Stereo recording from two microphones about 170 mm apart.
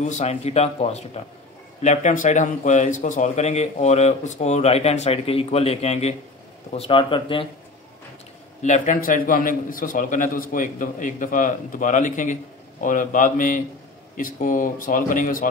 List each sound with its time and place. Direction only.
0.0 s speech: 40° left (ahead or behind)
8.6 s a man's voice: 50° left (ahead or behind)